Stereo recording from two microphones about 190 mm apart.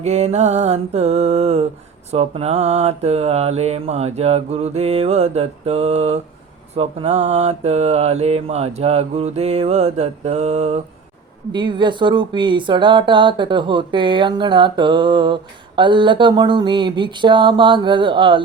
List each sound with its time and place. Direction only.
0.0 s mantra: 35° right (ahead or behind)
11.5 s speech: 25° right (ahead or behind)